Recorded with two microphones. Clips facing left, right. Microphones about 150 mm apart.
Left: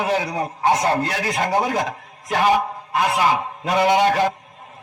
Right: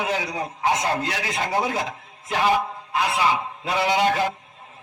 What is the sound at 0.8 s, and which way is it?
A man's voice, 35° left (ahead or behind).